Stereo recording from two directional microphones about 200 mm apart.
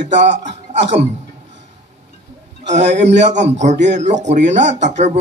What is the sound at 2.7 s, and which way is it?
Speech, 35° right (ahead or behind).